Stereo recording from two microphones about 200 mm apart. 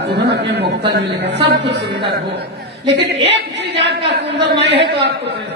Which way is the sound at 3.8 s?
60° right (ahead or behind).